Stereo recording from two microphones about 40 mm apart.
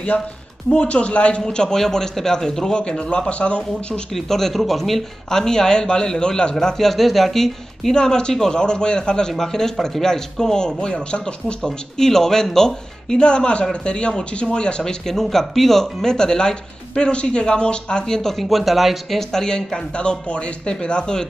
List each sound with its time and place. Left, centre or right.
0.7 s speech: left
1.4 s speech: centre
4.1 s speech: centre
5.3 s speech: centre
6.9 s speech: centre
7.9 s speech: centre
12.0 s speech: centre
19.3 s speech: centre
19.9 s speech: left